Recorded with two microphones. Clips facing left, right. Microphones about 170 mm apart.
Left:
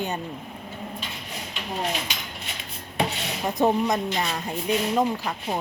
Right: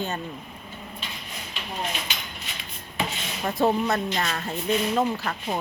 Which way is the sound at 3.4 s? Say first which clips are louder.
Left 1 dB; 15° left (ahead or behind).